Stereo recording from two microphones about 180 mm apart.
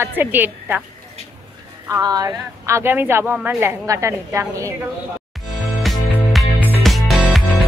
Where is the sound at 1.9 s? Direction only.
20° right (ahead or behind).